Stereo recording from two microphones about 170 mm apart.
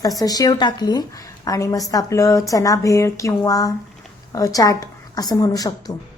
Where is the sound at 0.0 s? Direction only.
20° left (ahead or behind).